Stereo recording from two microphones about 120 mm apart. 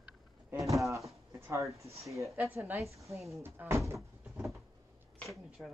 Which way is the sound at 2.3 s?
15° right (ahead or behind).